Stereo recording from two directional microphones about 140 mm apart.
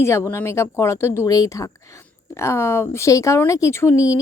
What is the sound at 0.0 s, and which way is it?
Speech, 20° left (ahead or behind).